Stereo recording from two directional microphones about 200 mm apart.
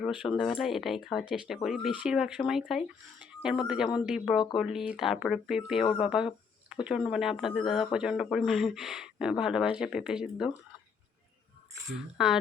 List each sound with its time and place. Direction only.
0.0 s speech: 5° right (ahead or behind)
12.1 s speech: centre (ahead or behind)